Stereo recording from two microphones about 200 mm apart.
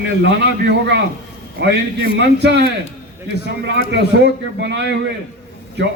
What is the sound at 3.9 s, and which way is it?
Speech, 60° right (ahead or behind).